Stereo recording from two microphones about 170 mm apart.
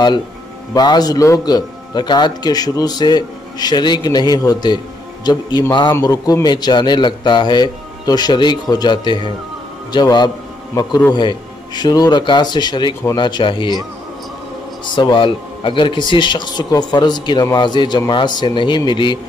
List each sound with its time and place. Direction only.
0.7 s a man's voice: 25° left (ahead or behind)
15.0 s speech: 30° left (ahead or behind)